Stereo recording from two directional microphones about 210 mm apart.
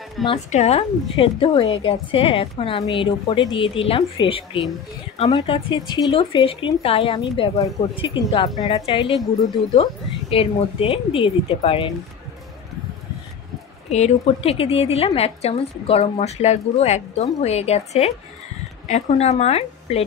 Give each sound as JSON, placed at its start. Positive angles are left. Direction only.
{"t": 0.3, "sound": "a woman's voice", "side_deg": 30}
{"t": 10.3, "sound": "a woman's voice", "side_deg": 25}
{"t": 13.8, "sound": "a woman's voice", "side_deg": 30}